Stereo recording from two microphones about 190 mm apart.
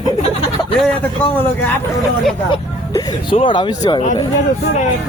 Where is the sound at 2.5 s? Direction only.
25° left (ahead or behind).